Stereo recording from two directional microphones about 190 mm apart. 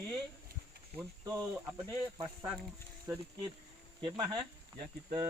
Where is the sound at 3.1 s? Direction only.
15° right (ahead or behind).